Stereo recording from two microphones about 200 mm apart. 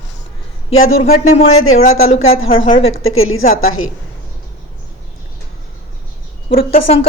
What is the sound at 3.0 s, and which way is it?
Speech, 90° left.